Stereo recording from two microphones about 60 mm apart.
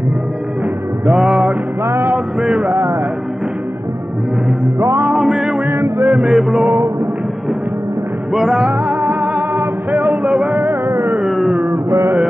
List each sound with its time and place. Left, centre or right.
1.1 s music: centre
1.9 s music: right
2.1 s music: centre
2.7 s music: right
4.7 s music: right
5.1 s music: centre
5.7 s music: right
6.2 s music: centre
8.3 s music: centre
8.6 s music: right
10.6 s music: right
11.2 s a sound: centre